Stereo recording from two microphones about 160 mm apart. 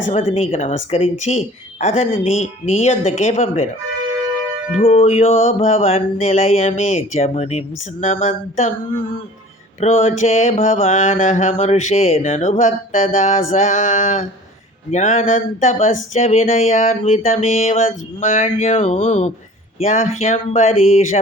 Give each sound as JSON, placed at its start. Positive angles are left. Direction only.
{"t": 0.1, "sound": "speech", "side_deg": 40}
{"t": 2.3, "sound": "mantra", "side_deg": 45}
{"t": 4.9, "sound": "mantra", "side_deg": 40}
{"t": 9.8, "sound": "mantra", "side_deg": 40}